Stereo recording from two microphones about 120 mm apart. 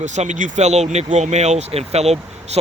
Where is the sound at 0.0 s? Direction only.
80° right.